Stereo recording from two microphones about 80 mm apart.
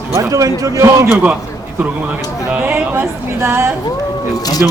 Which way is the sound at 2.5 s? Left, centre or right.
Right.